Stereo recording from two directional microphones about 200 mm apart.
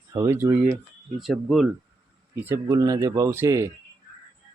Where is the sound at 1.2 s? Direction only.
Centre (ahead or behind).